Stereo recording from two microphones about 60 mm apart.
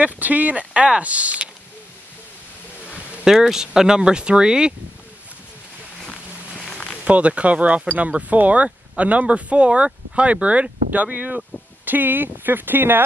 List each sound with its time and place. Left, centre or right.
0.0 s speech: right
3.3 s speech: centre
5.9 s a sound: centre
7.1 s speech: right